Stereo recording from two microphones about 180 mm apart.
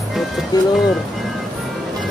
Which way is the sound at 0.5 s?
20° left (ahead or behind).